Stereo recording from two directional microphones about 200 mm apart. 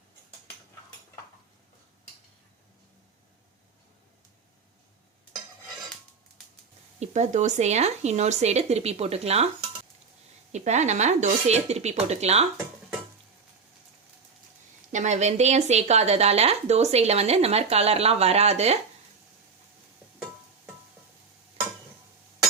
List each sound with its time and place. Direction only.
7.0 s speech: 35° right (ahead or behind)
10.5 s speech: 35° right (ahead or behind)
14.9 s speech: 35° right (ahead or behind)